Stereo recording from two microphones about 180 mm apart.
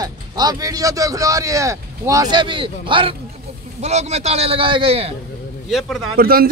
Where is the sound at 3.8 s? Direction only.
40° right (ahead or behind).